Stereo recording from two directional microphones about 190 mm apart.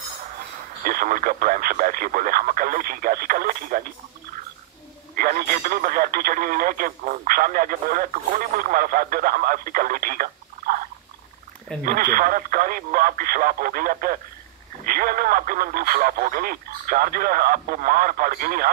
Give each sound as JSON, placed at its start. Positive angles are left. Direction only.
{"t": 0.8, "sound": "speech", "side_deg": -45}
{"t": 5.1, "sound": "speech", "side_deg": -45}
{"t": 11.8, "sound": "speech", "side_deg": -50}